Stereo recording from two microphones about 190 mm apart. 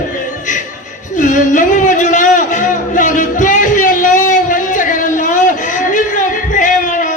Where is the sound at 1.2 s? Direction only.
40° left (ahead or behind).